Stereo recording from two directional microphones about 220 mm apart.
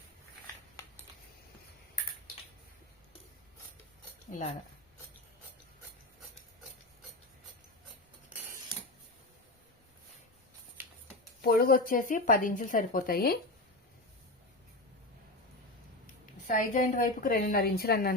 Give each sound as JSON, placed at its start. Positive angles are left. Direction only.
{"t": 11.4, "sound": "speech", "side_deg": 45}
{"t": 16.5, "sound": "speech", "side_deg": 35}